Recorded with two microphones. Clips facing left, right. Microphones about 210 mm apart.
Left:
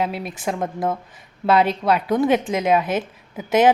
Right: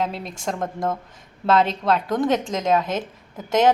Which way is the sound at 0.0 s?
5° left (ahead or behind).